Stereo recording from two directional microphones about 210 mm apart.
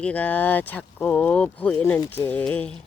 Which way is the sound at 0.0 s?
5° left (ahead or behind).